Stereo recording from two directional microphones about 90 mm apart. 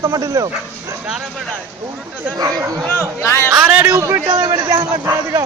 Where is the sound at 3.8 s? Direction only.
35° right (ahead or behind).